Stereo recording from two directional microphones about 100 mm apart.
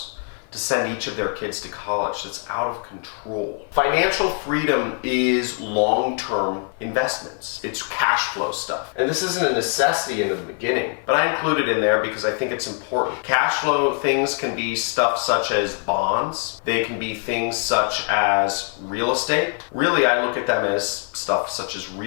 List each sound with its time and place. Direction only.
0.7 s speech: 15° left (ahead or behind)
3.8 s speech: 15° left (ahead or behind)